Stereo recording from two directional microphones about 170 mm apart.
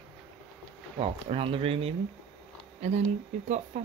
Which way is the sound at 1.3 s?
35° right (ahead or behind).